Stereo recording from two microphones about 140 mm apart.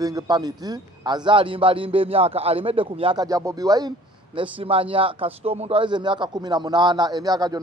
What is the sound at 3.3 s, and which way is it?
Speech, 25° right (ahead or behind).